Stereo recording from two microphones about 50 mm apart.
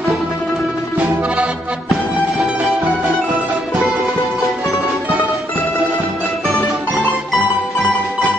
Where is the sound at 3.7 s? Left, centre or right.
Centre.